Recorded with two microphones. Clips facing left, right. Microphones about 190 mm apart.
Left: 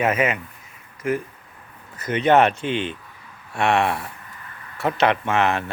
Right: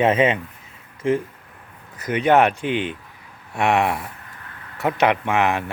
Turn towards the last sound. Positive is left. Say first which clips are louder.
# right 1 dB
turn(degrees=-15)  # may be behind; listen again after turning